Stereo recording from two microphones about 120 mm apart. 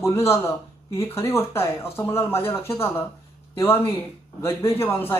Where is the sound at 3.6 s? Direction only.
20° left (ahead or behind).